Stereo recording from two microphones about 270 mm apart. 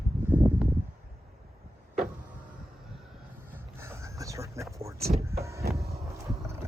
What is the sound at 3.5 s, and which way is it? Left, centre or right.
Vehicle, centre.